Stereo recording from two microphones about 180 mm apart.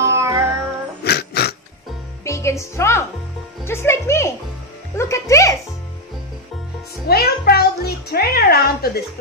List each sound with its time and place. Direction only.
0.0 s music: 15° right (ahead or behind)
1.0 s a sound: 65° left (ahead or behind)
2.2 s music: 15° left (ahead or behind)
7.1 s music: 60° left (ahead or behind)